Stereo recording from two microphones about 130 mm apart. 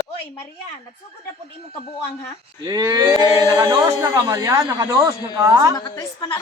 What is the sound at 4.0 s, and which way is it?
Speech, 25° right (ahead or behind).